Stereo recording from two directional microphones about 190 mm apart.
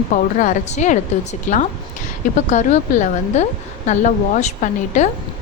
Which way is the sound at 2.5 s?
40° left (ahead or behind).